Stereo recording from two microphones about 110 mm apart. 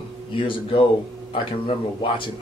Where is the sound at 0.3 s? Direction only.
50° left (ahead or behind).